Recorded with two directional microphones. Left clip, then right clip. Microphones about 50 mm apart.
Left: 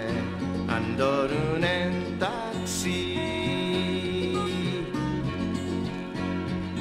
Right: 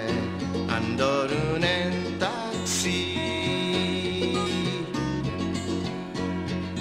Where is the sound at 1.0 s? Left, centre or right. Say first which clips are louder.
Even; left.